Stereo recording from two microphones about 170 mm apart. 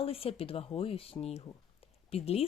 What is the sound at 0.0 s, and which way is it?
Speech, 35° left (ahead or behind).